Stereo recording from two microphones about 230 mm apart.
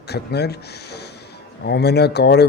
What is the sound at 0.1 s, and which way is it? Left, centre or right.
Speech, left.